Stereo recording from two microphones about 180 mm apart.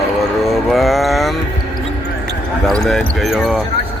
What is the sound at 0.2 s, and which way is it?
Music, centre (ahead or behind).